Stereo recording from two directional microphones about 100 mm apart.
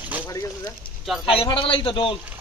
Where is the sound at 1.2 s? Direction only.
65° left (ahead or behind).